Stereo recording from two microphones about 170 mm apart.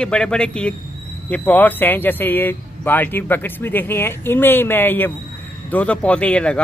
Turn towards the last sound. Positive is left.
turn(degrees=5)  # may be behind; listen again after turning